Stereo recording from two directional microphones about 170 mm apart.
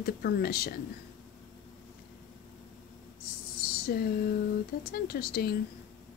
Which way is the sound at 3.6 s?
65° left (ahead or behind).